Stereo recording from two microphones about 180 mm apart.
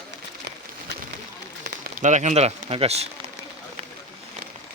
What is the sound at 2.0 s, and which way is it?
Speech, 40° right (ahead or behind).